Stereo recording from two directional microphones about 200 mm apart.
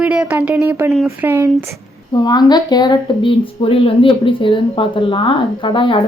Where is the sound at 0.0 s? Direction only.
5° right (ahead or behind).